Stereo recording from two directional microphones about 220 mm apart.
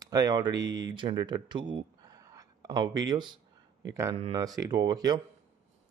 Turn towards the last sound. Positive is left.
turn(degrees=-15)  # may be behind; listen again after turning